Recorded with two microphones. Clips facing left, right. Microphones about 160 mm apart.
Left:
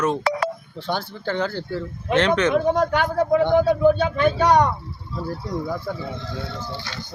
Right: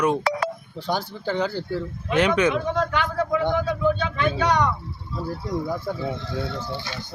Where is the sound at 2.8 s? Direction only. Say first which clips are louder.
Left 4 dB; 45° left (ahead or behind).